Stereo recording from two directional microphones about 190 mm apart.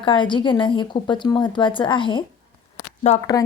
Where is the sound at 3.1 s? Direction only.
35° left (ahead or behind).